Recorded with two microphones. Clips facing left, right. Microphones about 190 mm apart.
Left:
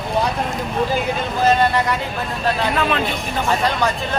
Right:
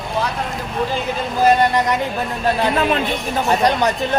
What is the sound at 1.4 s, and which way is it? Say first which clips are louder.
Speech: right 2 dB; 15° right (ahead or behind).